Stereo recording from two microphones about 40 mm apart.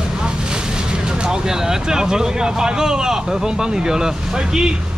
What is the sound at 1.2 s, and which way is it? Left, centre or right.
Speech, centre.